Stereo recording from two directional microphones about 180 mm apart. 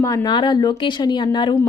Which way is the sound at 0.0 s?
20° left (ahead or behind).